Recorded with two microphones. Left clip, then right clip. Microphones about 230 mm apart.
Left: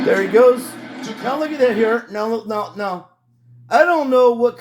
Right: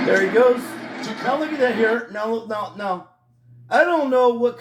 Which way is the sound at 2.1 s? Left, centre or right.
Left.